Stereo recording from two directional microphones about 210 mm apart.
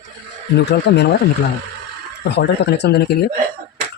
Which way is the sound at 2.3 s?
55° left (ahead or behind).